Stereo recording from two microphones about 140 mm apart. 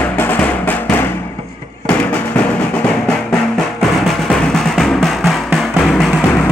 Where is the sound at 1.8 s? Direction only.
10° left (ahead or behind).